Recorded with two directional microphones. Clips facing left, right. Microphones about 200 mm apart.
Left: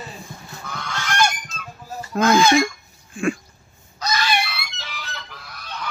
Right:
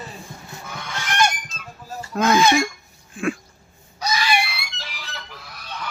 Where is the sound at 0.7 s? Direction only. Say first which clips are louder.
Left 3 dB; 15° right (ahead or behind).